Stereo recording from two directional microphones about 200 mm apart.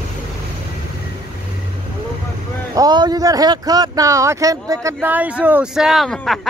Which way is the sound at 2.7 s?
20° right (ahead or behind).